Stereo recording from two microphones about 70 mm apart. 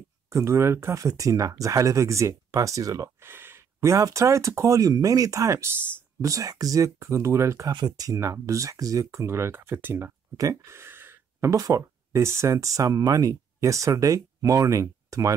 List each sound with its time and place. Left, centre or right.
0.3 s speech: right
0.9 s speech: right
3.2 s a sound: right
4.0 s speech: right
7.8 s speech: right
8.1 s speech: right
10.3 s speech: right
10.7 s a sound: right
11.5 s speech: right